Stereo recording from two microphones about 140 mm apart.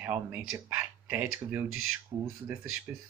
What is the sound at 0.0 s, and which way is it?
Speech, 15° right (ahead or behind).